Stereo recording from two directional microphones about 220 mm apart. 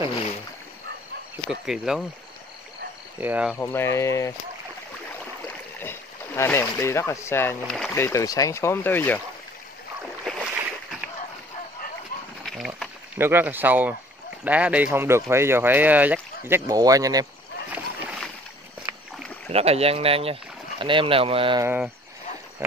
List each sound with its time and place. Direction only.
1.3 s speech: centre (ahead or behind)
3.2 s speech: 5° right (ahead or behind)
3.5 s speech: 10° left (ahead or behind)
5.8 s speech: 10° left (ahead or behind)
10.2 s boat: centre (ahead or behind)
12.4 s a sound: centre (ahead or behind)
13.2 s speech: 10° right (ahead or behind)
17.7 s boat: 5° right (ahead or behind)
18.8 s a sound: 5° right (ahead or behind)
19.5 s speech: 25° right (ahead or behind)
21.6 s speech: 10° right (ahead or behind)